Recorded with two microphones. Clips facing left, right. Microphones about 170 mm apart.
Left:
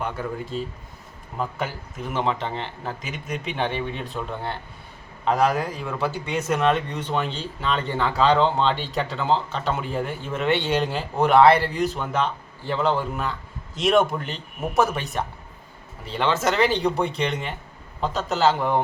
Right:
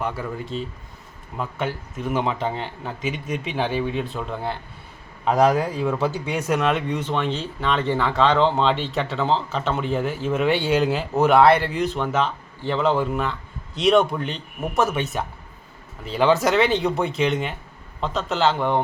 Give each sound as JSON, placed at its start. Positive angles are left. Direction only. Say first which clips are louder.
{"t": 0.5, "sound": "speech", "louder": "even", "side_deg": 5}
{"t": 5.2, "sound": "speech", "louder": "right 3 dB", "side_deg": -15}